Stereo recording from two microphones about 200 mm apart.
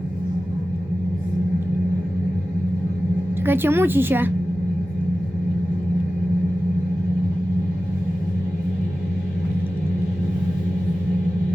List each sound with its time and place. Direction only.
3.4 s a woman's voice: 10° right (ahead or behind)